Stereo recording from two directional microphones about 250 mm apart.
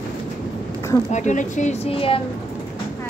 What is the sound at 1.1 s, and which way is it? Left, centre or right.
A woman's voice, left.